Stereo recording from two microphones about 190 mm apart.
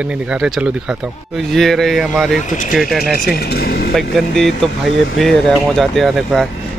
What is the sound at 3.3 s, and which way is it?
Speech, 55° left (ahead or behind).